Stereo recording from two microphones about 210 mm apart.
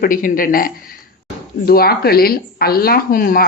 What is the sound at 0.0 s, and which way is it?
Speech, 40° left (ahead or behind).